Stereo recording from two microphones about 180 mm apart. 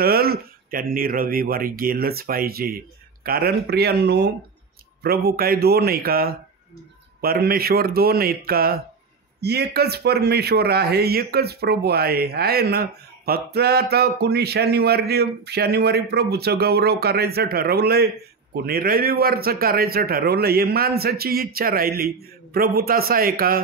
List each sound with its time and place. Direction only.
0.0 s a man's voice: 55° right (ahead or behind)